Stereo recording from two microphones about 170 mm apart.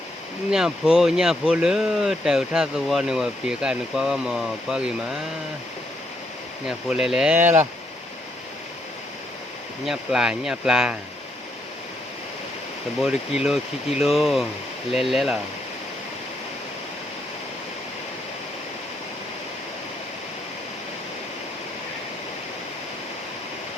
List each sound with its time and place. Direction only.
0.5 s speech: 5° right (ahead or behind)
6.7 s speech: 5° right (ahead or behind)
9.8 s speech: 5° right (ahead or behind)
13.0 s speech: 5° right (ahead or behind)